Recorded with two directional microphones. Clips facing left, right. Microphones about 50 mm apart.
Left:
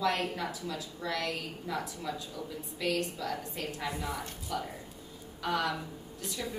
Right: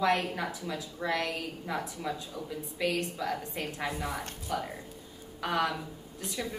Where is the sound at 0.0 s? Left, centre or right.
Right.